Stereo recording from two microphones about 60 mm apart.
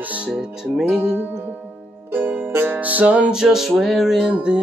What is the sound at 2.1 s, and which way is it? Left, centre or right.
Music, right.